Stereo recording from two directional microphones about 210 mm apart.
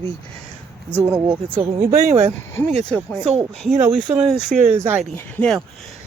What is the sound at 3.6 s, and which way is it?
Speech, centre (ahead or behind).